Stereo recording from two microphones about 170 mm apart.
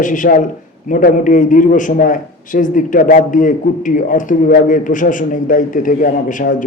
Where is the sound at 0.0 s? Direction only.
50° left (ahead or behind).